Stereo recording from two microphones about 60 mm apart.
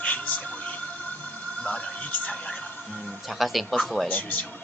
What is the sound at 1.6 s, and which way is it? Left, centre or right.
Speech, centre.